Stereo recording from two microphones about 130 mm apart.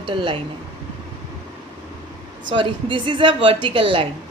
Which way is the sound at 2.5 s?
40° right (ahead or behind).